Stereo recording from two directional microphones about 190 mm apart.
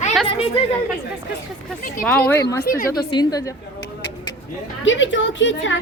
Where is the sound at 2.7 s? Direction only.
50° left (ahead or behind).